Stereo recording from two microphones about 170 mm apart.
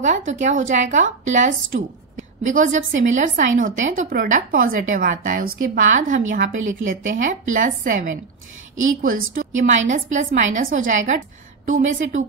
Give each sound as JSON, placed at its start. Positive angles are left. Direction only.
{"t": 0.0, "sound": "a woman's voice", "side_deg": -45}